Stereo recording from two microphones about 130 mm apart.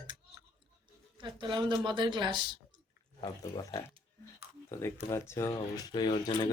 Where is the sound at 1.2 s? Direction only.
40° right (ahead or behind).